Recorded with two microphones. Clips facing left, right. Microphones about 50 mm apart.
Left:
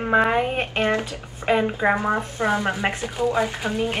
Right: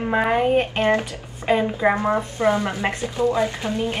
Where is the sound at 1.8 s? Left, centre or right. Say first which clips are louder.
Right 1 dB; centre.